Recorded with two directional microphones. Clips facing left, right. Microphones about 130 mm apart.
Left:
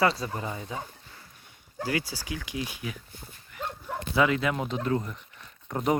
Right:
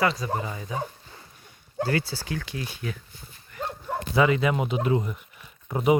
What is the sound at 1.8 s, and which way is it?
Speech, 10° left (ahead or behind).